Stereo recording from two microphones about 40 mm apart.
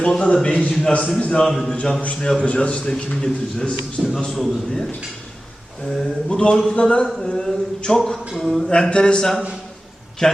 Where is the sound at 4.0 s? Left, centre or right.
Centre.